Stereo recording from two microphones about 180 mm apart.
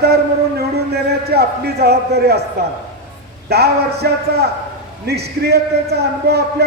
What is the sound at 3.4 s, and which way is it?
Speech, 65° right (ahead or behind).